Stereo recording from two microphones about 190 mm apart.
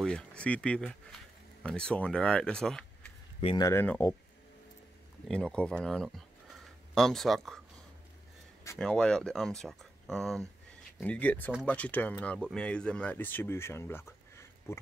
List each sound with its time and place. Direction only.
0.0 s speech: 5° left (ahead or behind)
3.3 s speech: 30° left (ahead or behind)
3.6 s speech: 10° left (ahead or behind)
5.3 s speech: 5° left (ahead or behind)
8.7 s speech: 5° left (ahead or behind)